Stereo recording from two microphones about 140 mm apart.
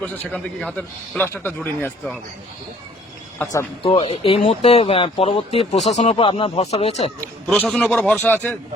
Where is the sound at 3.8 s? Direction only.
40° left (ahead or behind).